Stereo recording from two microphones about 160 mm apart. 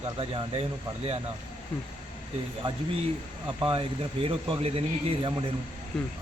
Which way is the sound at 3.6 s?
35° right (ahead or behind).